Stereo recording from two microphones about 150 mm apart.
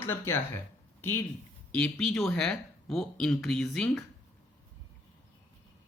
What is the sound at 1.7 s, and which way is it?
Speech, 10° left (ahead or behind).